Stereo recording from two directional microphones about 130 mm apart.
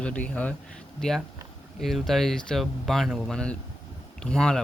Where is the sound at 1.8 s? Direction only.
Centre (ahead or behind).